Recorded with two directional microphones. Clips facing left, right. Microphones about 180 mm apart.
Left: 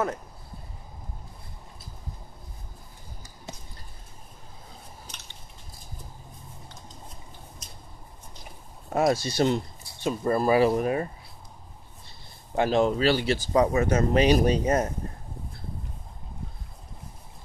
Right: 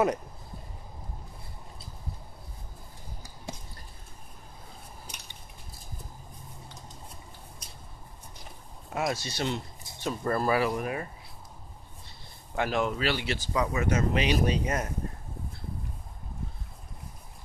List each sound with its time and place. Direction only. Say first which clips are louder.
8.9 s speech: left 8 dB; 40° left (ahead or behind)
10.0 s speech: left 4 dB; 15° left (ahead or behind); by 11.1 s 30° left (ahead or behind)
12.5 s speech: left 6 dB; 30° left (ahead or behind)